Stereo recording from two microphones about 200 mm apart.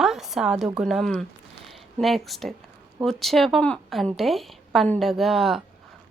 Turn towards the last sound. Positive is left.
turn(degrees=0)  # may be behind; listen again after turning